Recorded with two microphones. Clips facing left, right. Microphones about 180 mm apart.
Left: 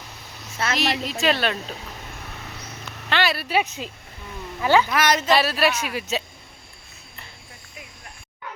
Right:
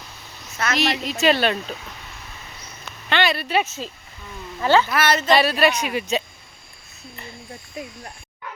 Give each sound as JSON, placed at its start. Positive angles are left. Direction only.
{"t": 0.5, "sound": "a woman's voice", "side_deg": 30}
{"t": 0.8, "sound": "speech", "side_deg": 0}
{"t": 3.1, "sound": "speech", "side_deg": 0}
{"t": 7.8, "sound": "speech", "side_deg": -35}